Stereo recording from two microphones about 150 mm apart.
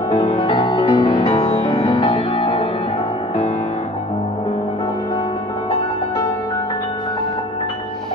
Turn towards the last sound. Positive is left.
turn(degrees=40)  # may be behind; listen again after turning